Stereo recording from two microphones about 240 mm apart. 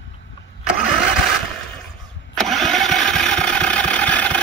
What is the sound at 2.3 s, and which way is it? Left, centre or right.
Engine starting, centre.